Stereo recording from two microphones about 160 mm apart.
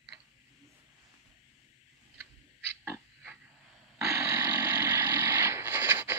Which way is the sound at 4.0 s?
15° right (ahead or behind).